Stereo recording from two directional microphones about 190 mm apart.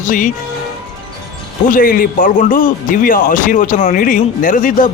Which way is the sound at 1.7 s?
50° left (ahead or behind).